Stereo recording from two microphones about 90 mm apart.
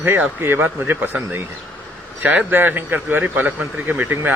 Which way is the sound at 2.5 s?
25° right (ahead or behind).